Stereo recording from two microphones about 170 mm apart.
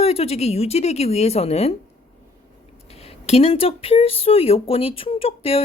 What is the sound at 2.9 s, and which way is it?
Speech, 35° left (ahead or behind).